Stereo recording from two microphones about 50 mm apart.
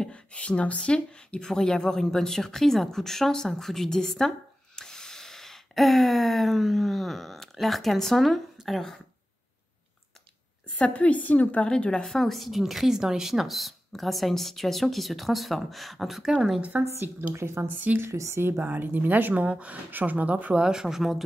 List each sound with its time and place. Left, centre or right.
0.0 s a woman's voice: left
4.7 s a sound: centre
8.6 s a woman's voice: centre
10.8 s speech: left
11.6 s speech: centre
12.1 s a woman's voice: centre
16.7 s speech: right
17.3 s speech: right
17.6 s speech: right
18.0 s speech: right
18.4 s a woman's voice: right
19.4 s speech: right
20.6 s speech: centre